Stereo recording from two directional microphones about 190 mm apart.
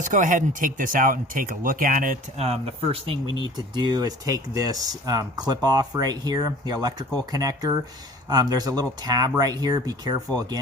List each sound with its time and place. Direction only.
0.0 s speech: 45° right (ahead or behind)
2.5 s speech: 30° right (ahead or behind)